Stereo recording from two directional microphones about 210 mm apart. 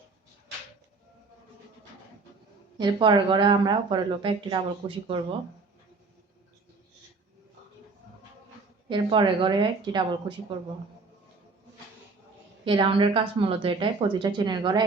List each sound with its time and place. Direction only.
2.7 s speech: 20° right (ahead or behind)
8.9 s speech: 20° right (ahead or behind)
12.6 s speech: 25° right (ahead or behind)